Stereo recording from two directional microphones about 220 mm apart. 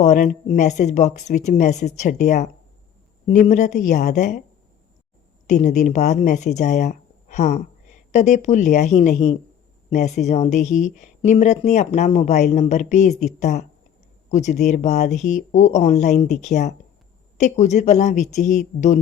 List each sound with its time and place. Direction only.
0.0 s speech: 35° left (ahead or behind)
5.5 s speech: 35° left (ahead or behind)